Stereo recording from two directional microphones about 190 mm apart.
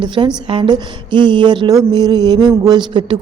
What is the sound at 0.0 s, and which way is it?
A woman's voice, 25° right (ahead or behind).